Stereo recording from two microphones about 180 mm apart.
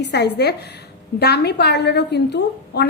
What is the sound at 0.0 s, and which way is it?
A woman's voice, 65° left (ahead or behind).